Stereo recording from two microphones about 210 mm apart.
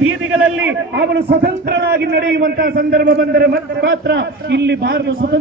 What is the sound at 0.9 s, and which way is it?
A man's voice, 50° right (ahead or behind).